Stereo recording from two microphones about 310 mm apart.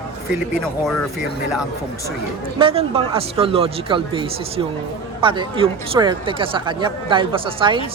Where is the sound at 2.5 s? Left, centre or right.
Centre.